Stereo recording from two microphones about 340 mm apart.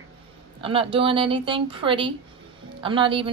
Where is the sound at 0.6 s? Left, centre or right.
Centre.